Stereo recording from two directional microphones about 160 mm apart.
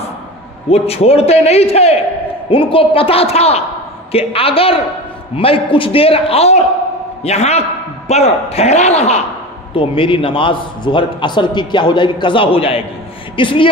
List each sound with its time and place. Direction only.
0.7 s a man's voice: 40° left (ahead or behind)